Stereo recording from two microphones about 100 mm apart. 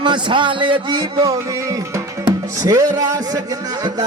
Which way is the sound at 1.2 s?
35° right (ahead or behind).